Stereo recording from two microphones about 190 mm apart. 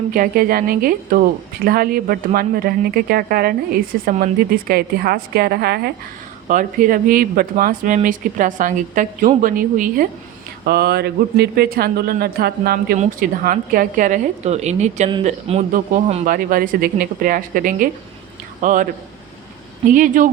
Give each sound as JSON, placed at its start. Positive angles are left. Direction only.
{"t": 0.1, "sound": "speech", "side_deg": -50}
{"t": 10.7, "sound": "speech", "side_deg": -55}
{"t": 19.9, "sound": "speech", "side_deg": -45}